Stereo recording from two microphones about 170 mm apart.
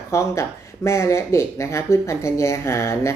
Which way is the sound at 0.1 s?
15° left (ahead or behind).